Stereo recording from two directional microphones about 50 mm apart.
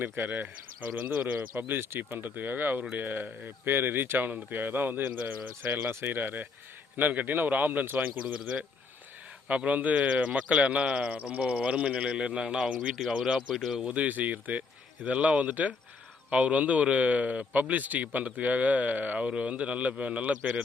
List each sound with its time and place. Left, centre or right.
0.0 s speech: right
1.1 s a man's voice: right
1.6 s speech: right
3.7 s speech: right
5.9 s speech: right
9.5 s a man's voice: right
13.5 s speech: centre
13.7 s a man's voice: right